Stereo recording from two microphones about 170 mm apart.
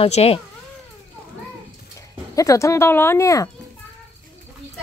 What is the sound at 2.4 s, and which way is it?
Speech, 20° left (ahead or behind).